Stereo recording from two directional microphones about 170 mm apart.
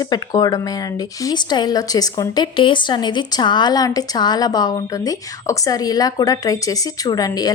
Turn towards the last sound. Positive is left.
turn(degrees=20)  # may be behind; listen again after turning